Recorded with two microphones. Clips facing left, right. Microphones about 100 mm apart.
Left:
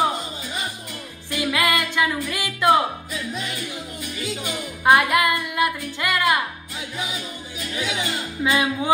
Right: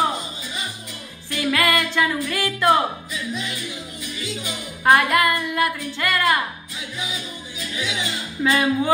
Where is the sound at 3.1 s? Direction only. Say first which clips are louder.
Even; 45° left (ahead or behind).